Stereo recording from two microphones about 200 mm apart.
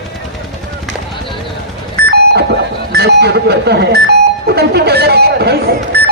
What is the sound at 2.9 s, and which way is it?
A man's voice, 55° right (ahead or behind).